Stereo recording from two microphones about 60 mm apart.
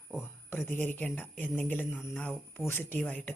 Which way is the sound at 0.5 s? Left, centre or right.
Left.